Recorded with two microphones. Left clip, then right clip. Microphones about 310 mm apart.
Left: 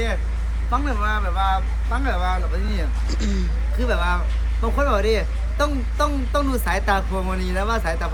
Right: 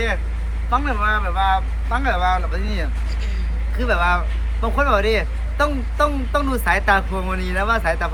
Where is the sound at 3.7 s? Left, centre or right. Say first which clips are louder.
Right 5 dB; centre.